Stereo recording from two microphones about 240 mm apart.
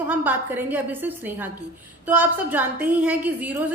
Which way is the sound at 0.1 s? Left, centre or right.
Centre.